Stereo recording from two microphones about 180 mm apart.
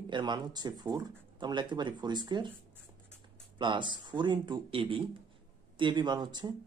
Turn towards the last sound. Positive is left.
turn(degrees=-25)  # may be behind; listen again after turning